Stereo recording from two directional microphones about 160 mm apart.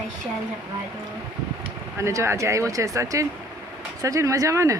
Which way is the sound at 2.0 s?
15° right (ahead or behind).